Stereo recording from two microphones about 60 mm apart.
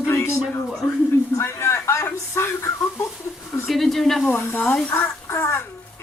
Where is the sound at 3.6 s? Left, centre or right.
Centre.